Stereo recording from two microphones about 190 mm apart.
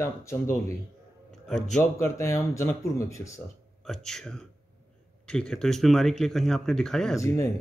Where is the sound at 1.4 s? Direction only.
Centre (ahead or behind).